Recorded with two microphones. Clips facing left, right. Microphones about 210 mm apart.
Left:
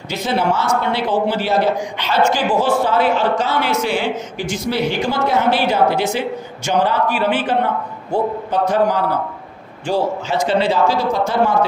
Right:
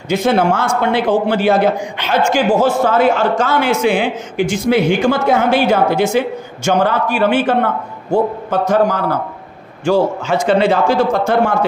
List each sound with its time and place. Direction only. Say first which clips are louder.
0.1 s a man's voice: right 5 dB; 50° right (ahead or behind)